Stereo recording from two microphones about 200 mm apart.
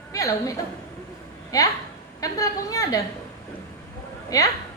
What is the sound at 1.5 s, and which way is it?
A woman's voice, 15° left (ahead or behind).